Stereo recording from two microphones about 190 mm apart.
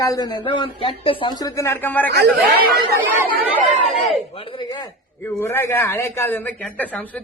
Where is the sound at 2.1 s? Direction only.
60° right (ahead or behind).